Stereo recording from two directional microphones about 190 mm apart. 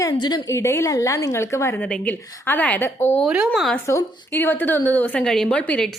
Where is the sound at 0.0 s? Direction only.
20° left (ahead or behind).